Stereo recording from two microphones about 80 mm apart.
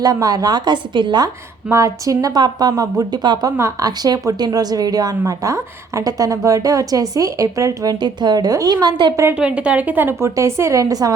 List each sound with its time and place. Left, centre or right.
0.0 s a woman's voice: right
1.7 s a woman's voice: right
3.2 s a woman's voice: right
7.9 s a woman's voice: right
9.3 s a woman's voice: centre; by 11.1 s right